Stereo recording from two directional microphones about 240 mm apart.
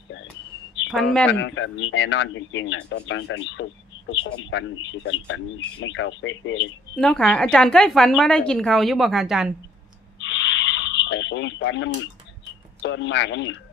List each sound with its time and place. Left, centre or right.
0.9 s speech: centre
1.3 s speech: left
6.9 s a woman's voice: centre
10.2 s a sound: left
12.8 s speech: left